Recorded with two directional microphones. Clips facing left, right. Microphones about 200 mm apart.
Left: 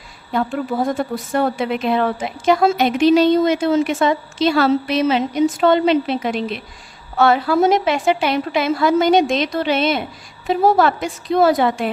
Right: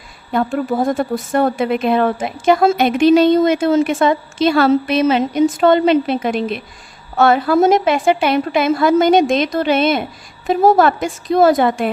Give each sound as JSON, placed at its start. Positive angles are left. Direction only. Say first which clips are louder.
{"t": 0.3, "sound": "a woman's voice", "louder": "right 3 dB", "side_deg": -50}